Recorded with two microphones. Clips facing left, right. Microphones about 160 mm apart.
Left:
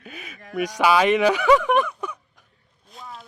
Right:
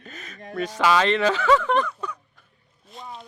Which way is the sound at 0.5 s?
15° left (ahead or behind).